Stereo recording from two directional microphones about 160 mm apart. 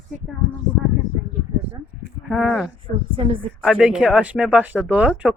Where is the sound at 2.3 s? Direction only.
Centre (ahead or behind).